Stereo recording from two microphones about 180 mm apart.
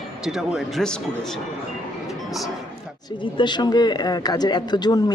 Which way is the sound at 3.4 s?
25° left (ahead or behind).